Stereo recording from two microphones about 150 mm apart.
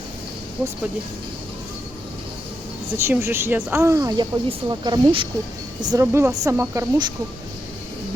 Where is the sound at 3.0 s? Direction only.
15° right (ahead or behind).